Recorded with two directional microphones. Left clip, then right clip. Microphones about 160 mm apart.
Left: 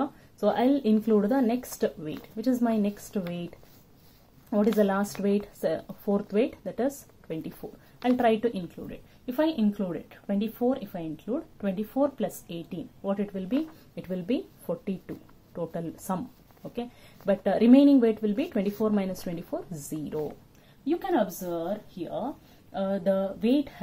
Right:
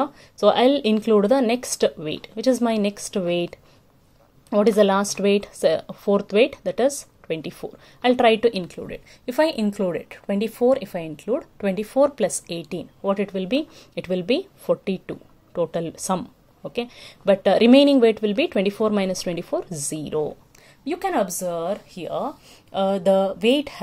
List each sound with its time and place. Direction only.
0.4 s a woman's voice: 25° right (ahead or behind)
17.3 s speech: 25° right (ahead or behind)
20.8 s a woman's voice: 40° right (ahead or behind)
22.7 s speech: 30° right (ahead or behind)